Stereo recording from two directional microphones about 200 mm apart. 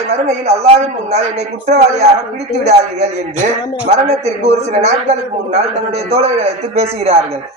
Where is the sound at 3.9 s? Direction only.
30° right (ahead or behind).